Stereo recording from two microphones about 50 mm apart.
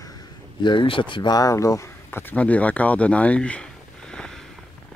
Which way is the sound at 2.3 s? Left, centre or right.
Left.